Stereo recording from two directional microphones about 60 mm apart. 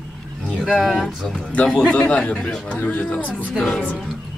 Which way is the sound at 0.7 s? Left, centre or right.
Centre.